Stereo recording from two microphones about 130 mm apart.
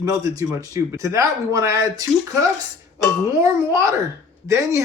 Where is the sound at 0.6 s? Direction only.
25° right (ahead or behind).